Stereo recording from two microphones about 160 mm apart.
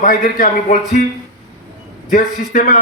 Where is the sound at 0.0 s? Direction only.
60° left (ahead or behind).